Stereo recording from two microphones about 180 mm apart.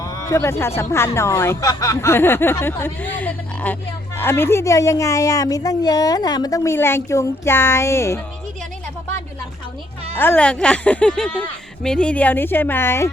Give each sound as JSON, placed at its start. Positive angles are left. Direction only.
{"t": 0.0, "sound": "a sound", "side_deg": 20}
{"t": 0.8, "sound": "a woman's voice", "side_deg": 15}
{"t": 10.2, "sound": "a woman's voice", "side_deg": 10}